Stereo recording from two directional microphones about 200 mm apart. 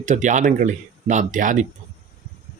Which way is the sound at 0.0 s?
40° right (ahead or behind).